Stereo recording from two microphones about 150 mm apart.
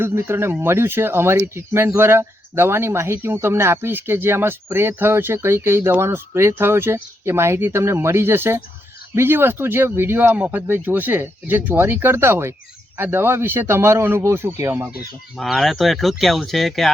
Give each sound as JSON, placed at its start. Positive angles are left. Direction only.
{"t": 0.0, "sound": "speech", "side_deg": -15}
{"t": 15.4, "sound": "speech", "side_deg": 0}